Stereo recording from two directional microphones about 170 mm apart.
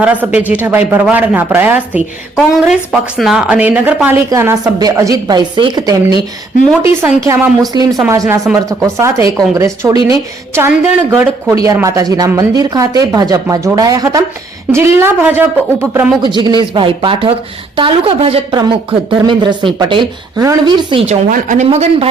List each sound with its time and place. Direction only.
0.0 s speech: 10° right (ahead or behind)
2.3 s a woman's voice: centre (ahead or behind); by 6.2 s 25° right (ahead or behind)
7.0 s speech: 10° right (ahead or behind)
7.7 s speech: 25° right (ahead or behind)
16.2 s speech: 25° right (ahead or behind)
21.1 s speech: 50° right (ahead or behind)